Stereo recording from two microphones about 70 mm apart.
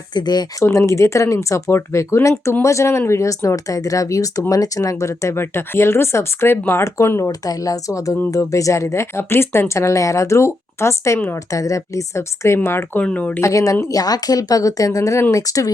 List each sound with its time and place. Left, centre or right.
0.1 s speech: left
0.6 s speech: left
7.3 s speech: left
13.0 s speech: left
13.4 s speech: left
13.8 s speech: left